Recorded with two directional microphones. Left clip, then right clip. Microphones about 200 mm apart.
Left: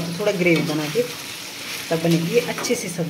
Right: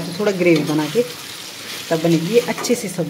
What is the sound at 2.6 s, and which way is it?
Speech, 20° right (ahead or behind).